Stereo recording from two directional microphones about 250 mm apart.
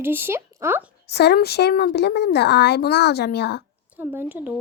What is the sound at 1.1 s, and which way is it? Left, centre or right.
A woman's voice, left.